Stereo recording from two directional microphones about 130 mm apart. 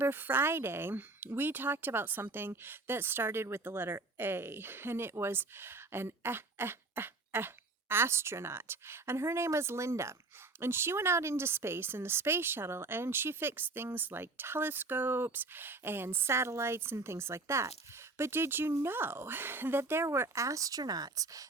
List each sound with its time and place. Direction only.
0.0 s speech: 15° right (ahead or behind)